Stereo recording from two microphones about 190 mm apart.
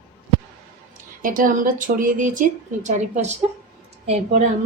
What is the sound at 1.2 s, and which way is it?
A woman's voice, 45° right (ahead or behind).